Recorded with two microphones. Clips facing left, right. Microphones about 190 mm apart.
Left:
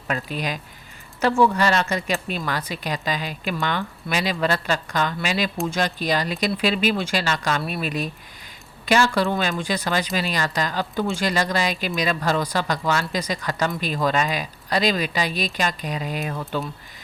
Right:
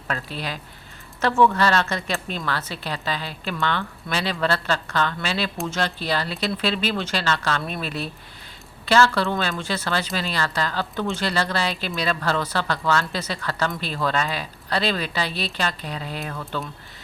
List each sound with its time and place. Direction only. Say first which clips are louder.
0.1 s speech: left 3 dB; 15° left (ahead or behind)